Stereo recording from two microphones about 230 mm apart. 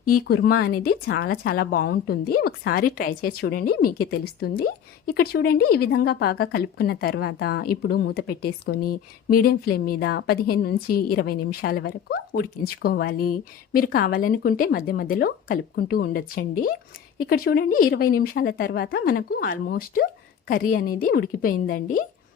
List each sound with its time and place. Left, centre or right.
0.0 s speech: left